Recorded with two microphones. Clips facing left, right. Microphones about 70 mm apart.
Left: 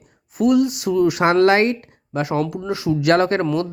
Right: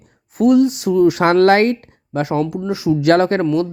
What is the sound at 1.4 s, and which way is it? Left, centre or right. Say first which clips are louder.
Speech: right 2 dB; right.